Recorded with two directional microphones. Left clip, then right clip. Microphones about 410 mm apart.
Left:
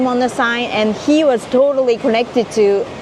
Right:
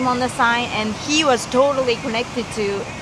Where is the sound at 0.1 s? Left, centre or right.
Centre.